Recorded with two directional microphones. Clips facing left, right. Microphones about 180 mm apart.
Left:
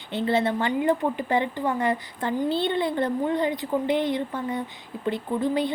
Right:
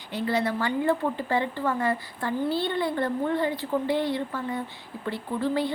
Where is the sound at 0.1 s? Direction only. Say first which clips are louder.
Left 3 dB; 25° left (ahead or behind).